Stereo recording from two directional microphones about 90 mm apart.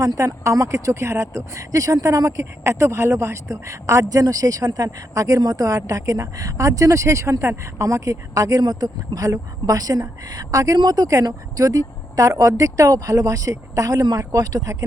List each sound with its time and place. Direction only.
0.0 s speech: 40° right (ahead or behind)